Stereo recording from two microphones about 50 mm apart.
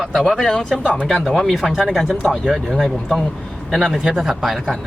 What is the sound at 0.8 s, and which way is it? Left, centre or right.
Speech, left.